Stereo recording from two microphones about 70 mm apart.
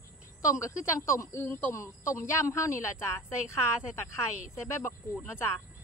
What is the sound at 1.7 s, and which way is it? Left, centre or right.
A woman's voice, left.